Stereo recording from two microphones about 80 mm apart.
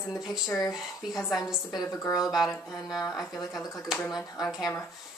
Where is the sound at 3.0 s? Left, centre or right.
Left.